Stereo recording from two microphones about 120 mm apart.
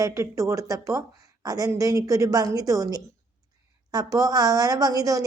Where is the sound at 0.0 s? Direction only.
25° right (ahead or behind).